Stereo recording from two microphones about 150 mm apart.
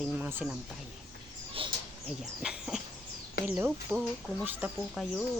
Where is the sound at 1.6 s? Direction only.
35° right (ahead or behind).